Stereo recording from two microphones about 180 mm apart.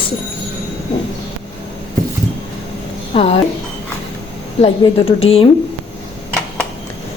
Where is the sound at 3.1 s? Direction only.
35° left (ahead or behind).